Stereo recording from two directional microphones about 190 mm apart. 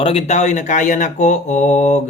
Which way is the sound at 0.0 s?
35° left (ahead or behind).